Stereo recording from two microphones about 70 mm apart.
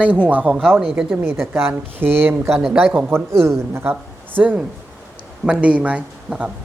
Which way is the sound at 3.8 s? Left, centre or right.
Right.